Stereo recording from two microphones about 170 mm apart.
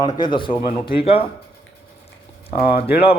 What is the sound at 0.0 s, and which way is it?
Speech, 25° left (ahead or behind).